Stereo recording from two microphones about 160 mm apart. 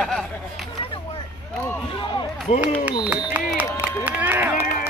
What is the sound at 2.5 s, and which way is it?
Speech, 40° left (ahead or behind).